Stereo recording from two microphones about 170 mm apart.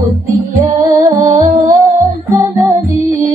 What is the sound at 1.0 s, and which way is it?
Music, 20° right (ahead or behind).